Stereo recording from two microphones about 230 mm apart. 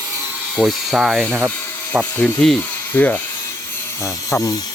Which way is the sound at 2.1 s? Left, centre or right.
Centre.